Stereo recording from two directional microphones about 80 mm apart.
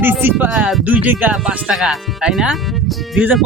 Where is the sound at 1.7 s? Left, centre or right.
Centre.